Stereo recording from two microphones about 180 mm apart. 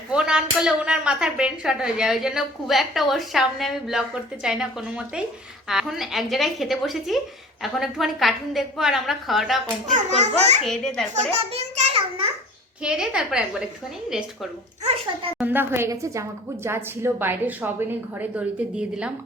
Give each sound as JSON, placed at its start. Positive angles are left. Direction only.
{"t": 0.1, "sound": "a woman's voice", "side_deg": -5}
{"t": 9.8, "sound": "a child's voice", "side_deg": -40}
{"t": 10.6, "sound": "a woman's voice", "side_deg": 0}
{"t": 11.1, "sound": "a child's voice", "side_deg": -35}
{"t": 12.8, "sound": "a woman's voice", "side_deg": -5}
{"t": 14.8, "sound": "a child's voice", "side_deg": -35}
{"t": 15.4, "sound": "a woman's voice", "side_deg": -10}